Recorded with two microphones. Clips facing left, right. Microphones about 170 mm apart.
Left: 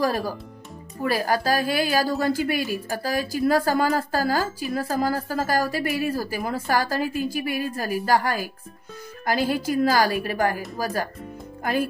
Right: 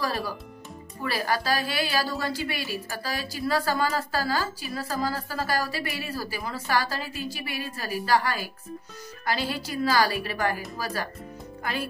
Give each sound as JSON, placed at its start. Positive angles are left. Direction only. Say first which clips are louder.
{"t": 0.0, "sound": "a woman's voice", "louder": "left 6 dB", "side_deg": 45}